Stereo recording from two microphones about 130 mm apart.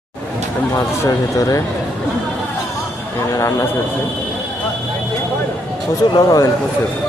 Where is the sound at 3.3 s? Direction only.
25° left (ahead or behind).